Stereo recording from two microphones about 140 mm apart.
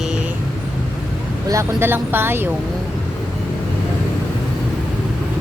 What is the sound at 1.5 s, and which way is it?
Speech, 20° right (ahead or behind).